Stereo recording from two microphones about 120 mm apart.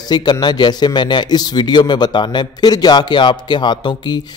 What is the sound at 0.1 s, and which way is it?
Speech, 35° left (ahead or behind).